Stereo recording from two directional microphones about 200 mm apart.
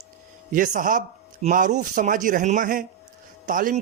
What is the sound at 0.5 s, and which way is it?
Speech, 40° right (ahead or behind).